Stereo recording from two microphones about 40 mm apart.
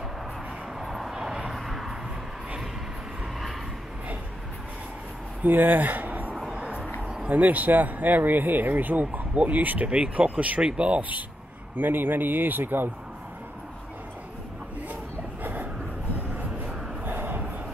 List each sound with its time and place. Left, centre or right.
0.7 s vehicle: centre
1.1 s vehicle: right
1.5 s vehicle: centre
5.4 s speech: right
6.5 s music: right
7.0 s a sound: right
7.2 s speech: right
9.8 s speech: right
10.6 s speech: right
11.0 s speech: right
11.7 s speech: right
15.4 s a sound: right
17.0 s a sound: right